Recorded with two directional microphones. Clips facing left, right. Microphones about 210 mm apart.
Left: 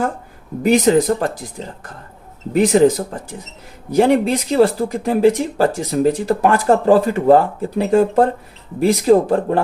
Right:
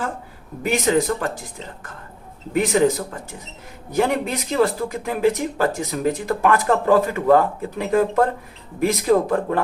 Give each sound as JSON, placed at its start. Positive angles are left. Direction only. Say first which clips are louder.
{"t": 0.6, "sound": "speech", "louder": "left 6 dB", "side_deg": 35}